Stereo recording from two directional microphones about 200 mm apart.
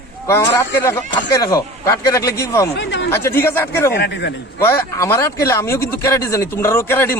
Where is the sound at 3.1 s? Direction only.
10° left (ahead or behind).